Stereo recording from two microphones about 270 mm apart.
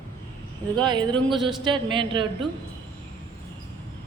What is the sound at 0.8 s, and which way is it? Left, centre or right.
A man's voice, centre.